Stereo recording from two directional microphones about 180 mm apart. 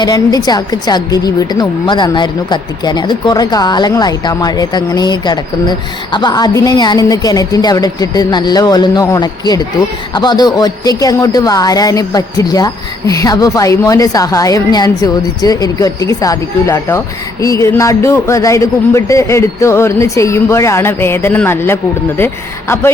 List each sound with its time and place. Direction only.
0.0 s a woman's voice: 20° left (ahead or behind)